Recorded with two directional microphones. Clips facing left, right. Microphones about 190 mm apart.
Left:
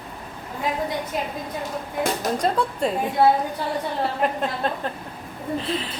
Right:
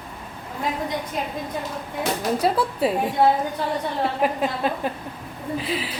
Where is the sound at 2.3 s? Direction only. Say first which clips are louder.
Right 1 dB; 5° right (ahead or behind).